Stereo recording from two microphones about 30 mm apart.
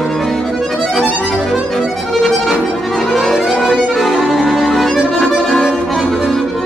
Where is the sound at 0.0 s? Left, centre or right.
Centre.